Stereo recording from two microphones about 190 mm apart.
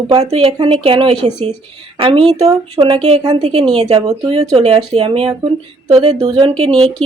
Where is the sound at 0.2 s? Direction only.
30° right (ahead or behind).